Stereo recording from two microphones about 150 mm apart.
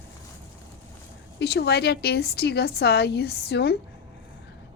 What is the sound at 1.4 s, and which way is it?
A woman's voice, 90° left.